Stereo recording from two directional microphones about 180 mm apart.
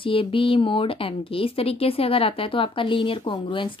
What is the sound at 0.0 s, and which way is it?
A woman's voice, 30° left (ahead or behind).